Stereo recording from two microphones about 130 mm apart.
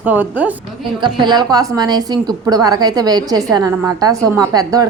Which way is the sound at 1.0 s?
35° right (ahead or behind).